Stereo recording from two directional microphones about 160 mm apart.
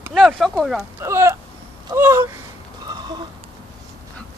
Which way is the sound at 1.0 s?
15° right (ahead or behind).